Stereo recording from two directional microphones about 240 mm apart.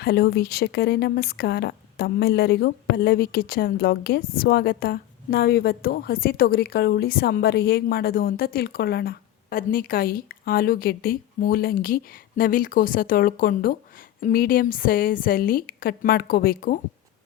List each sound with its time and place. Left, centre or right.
0.0 s speech: left